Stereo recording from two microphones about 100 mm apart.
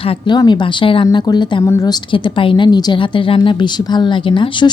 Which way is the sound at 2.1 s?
60° left (ahead or behind).